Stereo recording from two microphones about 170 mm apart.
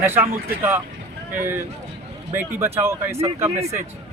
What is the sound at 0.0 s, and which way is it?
Speech, 15° right (ahead or behind).